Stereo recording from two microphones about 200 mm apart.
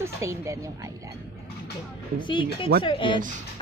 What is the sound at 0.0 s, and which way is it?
A woman's voice, 15° right (ahead or behind).